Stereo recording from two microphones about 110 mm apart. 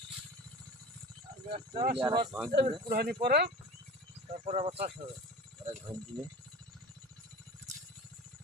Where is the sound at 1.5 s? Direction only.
45° right (ahead or behind).